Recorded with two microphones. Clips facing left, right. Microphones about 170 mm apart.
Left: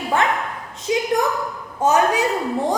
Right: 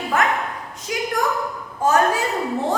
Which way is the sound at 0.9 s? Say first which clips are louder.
Left 6 dB; 25° left (ahead or behind).